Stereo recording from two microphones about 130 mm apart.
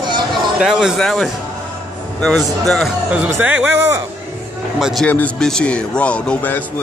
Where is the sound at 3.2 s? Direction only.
15° right (ahead or behind).